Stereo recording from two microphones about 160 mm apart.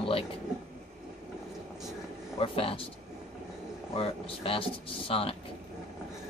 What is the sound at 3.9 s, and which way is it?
Speech, 35° left (ahead or behind).